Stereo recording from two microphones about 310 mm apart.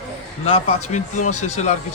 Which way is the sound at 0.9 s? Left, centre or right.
Left.